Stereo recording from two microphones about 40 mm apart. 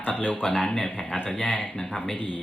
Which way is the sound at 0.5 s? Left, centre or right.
Left.